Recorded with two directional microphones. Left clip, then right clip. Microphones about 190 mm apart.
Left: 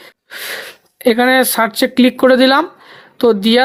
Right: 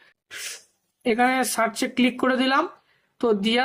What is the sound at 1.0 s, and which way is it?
Speech, 40° left (ahead or behind).